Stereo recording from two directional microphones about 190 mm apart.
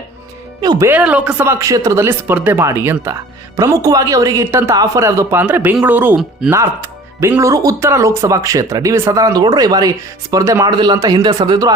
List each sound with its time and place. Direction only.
0.6 s speech: 20° right (ahead or behind)